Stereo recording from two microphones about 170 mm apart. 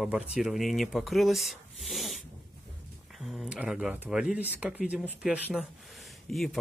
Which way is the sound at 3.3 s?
5° right (ahead or behind).